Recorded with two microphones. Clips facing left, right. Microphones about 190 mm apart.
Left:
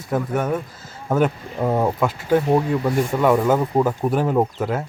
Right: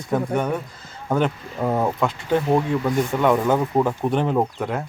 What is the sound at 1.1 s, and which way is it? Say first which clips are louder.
Speech: left 2 dB; 5° left (ahead or behind).